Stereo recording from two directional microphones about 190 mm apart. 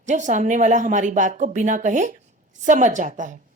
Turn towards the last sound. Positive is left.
turn(degrees=-40)  # may be behind; listen again after turning